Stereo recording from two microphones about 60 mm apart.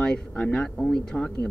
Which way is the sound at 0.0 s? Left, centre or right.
Centre.